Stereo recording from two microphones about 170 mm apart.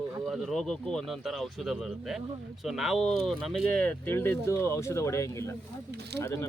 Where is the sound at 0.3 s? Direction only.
Centre (ahead or behind).